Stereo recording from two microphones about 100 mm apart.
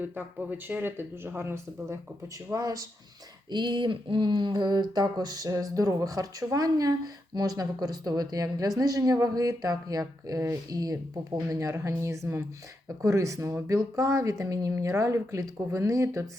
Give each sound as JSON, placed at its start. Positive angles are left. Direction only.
{"t": 0.0, "sound": "speech", "side_deg": -15}
{"t": 3.5, "sound": "speech", "side_deg": -50}